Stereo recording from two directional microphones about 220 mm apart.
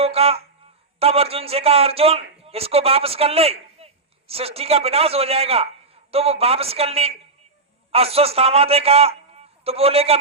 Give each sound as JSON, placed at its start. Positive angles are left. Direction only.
{"t": 0.0, "sound": "a man's voice", "side_deg": -25}